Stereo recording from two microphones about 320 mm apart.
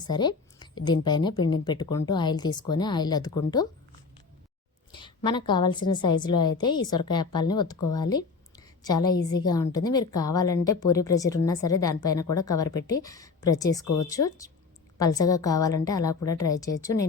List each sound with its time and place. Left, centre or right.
0.0 s a woman's voice: centre
4.9 s a woman's voice: centre
7.9 s a sound: centre
9.5 s a woman's voice: centre
13.8 s a woman's voice: left
14.1 s a woman's voice: centre